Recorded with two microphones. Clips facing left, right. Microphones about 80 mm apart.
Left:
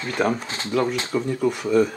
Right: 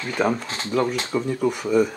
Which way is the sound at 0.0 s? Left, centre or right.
Centre.